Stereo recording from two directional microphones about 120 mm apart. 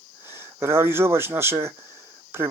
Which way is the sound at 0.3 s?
20° right (ahead or behind).